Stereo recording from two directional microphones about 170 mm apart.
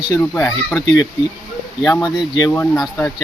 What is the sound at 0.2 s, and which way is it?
Speech, 10° left (ahead or behind).